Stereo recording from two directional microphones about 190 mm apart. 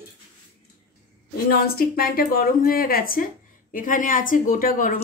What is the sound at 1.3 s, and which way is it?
Speech, 55° left (ahead or behind).